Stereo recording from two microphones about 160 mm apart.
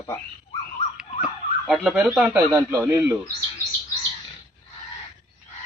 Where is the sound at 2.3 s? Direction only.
15° right (ahead or behind).